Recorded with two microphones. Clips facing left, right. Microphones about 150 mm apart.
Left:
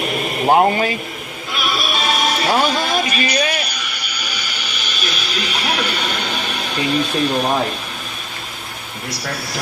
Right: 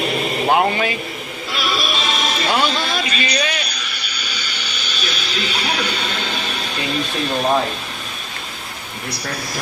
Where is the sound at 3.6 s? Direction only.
10° left (ahead or behind).